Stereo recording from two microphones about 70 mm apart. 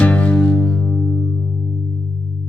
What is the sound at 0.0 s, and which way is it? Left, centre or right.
Music, centre.